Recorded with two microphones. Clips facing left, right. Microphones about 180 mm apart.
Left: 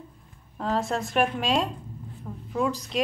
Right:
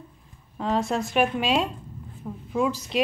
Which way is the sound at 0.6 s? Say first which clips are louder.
Right 2 dB; centre (ahead or behind).